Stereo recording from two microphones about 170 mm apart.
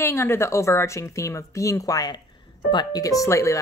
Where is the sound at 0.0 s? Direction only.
15° left (ahead or behind).